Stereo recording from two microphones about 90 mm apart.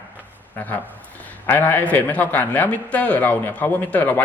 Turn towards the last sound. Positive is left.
turn(degrees=20)  # may be behind; listen again after turning